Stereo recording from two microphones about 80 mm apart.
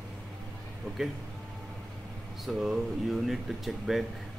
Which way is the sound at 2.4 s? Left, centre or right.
Centre.